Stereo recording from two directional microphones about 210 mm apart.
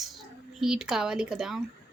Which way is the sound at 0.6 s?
5° right (ahead or behind).